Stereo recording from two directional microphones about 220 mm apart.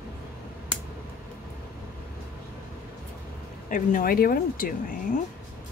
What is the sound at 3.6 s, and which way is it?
Speech, 35° left (ahead or behind).